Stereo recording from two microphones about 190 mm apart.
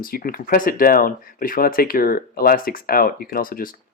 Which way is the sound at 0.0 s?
50° left (ahead or behind).